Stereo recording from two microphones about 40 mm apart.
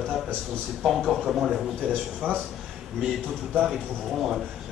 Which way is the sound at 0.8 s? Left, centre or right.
Centre.